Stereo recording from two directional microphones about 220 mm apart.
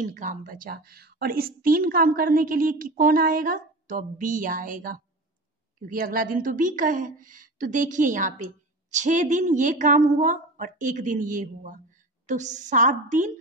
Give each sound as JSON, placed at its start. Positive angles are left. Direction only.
{"t": 0.0, "sound": "a woman's voice", "side_deg": -35}